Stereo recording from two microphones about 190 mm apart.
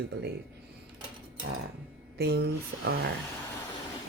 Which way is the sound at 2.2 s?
60° right (ahead or behind).